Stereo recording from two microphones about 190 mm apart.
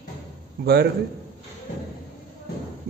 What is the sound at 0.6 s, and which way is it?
Speech, 55° right (ahead or behind).